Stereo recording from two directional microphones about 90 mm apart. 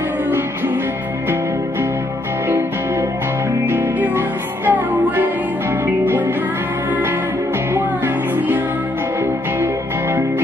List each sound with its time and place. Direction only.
3.6 s music: 25° right (ahead or behind)
7.7 s music: 20° right (ahead or behind)